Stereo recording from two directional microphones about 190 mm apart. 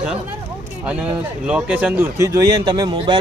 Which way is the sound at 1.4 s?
5° right (ahead or behind).